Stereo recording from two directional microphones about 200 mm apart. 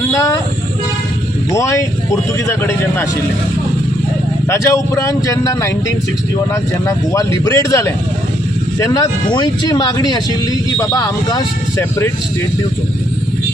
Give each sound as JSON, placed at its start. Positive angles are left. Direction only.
{"t": 0.1, "sound": "vehicle", "side_deg": 15}
{"t": 1.5, "sound": "speech", "side_deg": 15}
{"t": 4.4, "sound": "speech", "side_deg": 15}